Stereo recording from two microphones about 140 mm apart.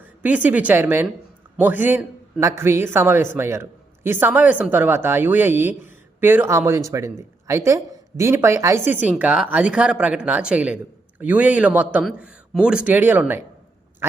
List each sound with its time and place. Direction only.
0.0 s a woman's voice: 10° right (ahead or behind)